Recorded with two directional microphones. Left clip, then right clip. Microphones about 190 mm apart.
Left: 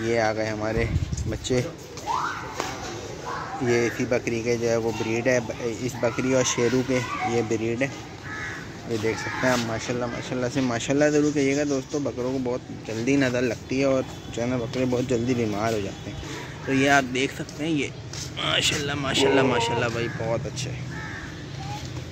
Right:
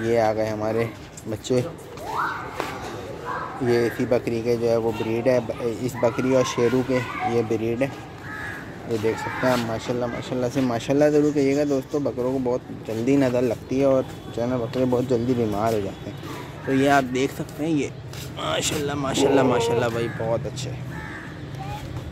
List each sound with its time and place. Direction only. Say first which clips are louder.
0.0 s speech: right 3 dB; 15° right (ahead or behind)
3.6 s speech: right 2 dB; 10° right (ahead or behind)
9.0 s speech: right 1 dB; 5° right (ahead or behind)
13.0 s speech: right 2 dB; 15° right (ahead or behind)